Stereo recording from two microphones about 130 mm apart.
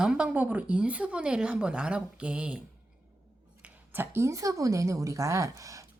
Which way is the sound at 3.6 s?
15° right (ahead or behind).